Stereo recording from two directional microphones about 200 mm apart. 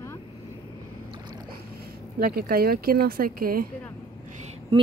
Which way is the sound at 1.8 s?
50° right (ahead or behind).